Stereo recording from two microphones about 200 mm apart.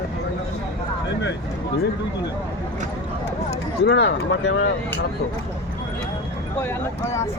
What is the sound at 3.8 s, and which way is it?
Speech, 60° left (ahead or behind).